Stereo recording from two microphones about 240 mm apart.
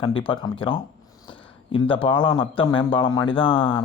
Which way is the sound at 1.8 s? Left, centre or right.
Left.